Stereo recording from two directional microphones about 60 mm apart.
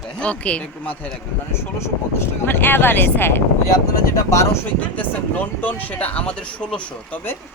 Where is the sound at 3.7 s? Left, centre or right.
Left.